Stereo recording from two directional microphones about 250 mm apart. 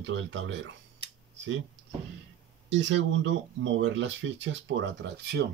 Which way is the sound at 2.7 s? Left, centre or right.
Right.